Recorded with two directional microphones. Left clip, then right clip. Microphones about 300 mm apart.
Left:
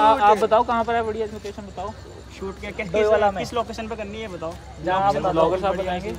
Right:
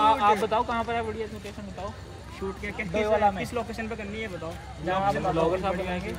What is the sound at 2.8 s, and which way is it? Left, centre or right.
A man's voice, left.